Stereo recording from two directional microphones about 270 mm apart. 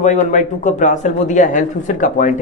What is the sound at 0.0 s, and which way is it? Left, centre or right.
Speech, left.